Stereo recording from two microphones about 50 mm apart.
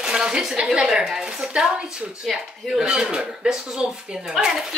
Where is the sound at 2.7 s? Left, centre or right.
Centre.